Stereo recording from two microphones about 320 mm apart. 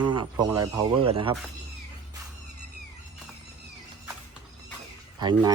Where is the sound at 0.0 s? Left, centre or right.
Centre.